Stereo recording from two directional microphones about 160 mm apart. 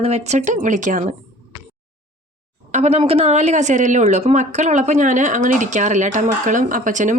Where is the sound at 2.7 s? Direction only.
45° right (ahead or behind).